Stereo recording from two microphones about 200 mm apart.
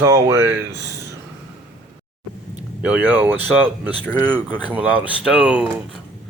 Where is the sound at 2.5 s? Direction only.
10° right (ahead or behind).